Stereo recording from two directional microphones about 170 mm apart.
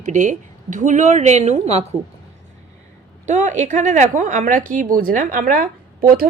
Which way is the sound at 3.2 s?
45° right (ahead or behind).